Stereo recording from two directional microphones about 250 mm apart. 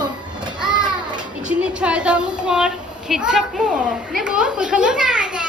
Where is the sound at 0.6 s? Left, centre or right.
Centre.